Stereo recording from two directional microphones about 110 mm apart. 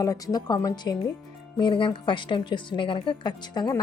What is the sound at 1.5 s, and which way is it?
A woman's voice, 45° left (ahead or behind).